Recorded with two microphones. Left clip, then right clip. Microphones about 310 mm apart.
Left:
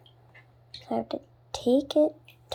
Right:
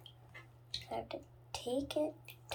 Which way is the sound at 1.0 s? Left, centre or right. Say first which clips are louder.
Left 11 dB; left.